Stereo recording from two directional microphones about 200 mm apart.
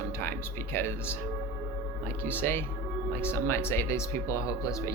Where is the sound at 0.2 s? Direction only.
10° left (ahead or behind).